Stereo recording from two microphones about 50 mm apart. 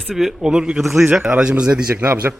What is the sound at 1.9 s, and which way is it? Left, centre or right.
Speech, right.